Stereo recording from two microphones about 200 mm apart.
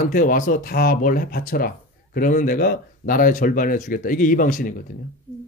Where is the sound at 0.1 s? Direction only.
40° left (ahead or behind).